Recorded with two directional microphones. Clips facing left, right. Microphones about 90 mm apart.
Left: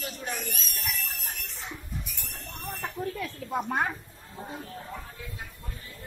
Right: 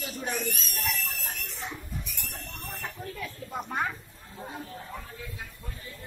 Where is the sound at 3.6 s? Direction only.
60° left (ahead or behind).